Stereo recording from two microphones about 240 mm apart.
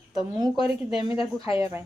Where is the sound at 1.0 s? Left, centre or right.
Left.